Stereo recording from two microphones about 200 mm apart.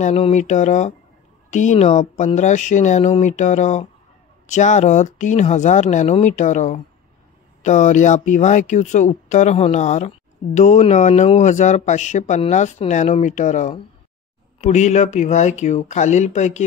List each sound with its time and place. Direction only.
0.0 s speech: 35° left (ahead or behind)